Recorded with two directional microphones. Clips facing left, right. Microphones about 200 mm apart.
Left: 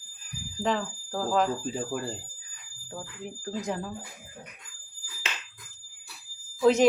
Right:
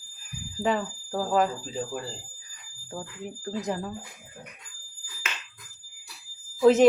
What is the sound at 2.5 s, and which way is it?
Speech, 5° right (ahead or behind).